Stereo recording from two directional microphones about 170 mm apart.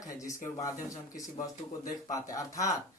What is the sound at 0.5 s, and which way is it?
Speech, 20° left (ahead or behind).